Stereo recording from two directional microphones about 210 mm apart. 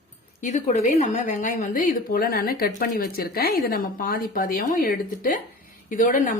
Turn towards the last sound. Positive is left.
turn(degrees=40)  # may be behind; listen again after turning